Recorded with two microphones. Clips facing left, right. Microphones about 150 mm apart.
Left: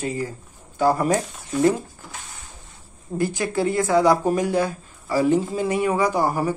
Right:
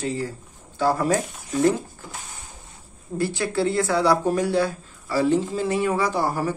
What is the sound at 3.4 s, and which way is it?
Speech, 15° left (ahead or behind).